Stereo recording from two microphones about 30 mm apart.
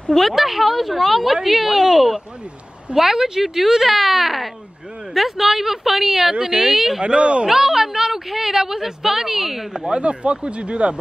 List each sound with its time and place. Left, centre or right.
0.3 s a woman's voice: centre
7.0 s speech: right
7.4 s a woman's voice: centre
9.9 s speech: right